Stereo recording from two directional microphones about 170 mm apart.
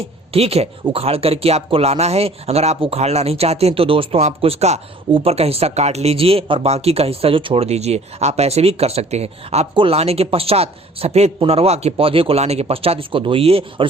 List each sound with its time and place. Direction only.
0.0 s speech: 35° right (ahead or behind)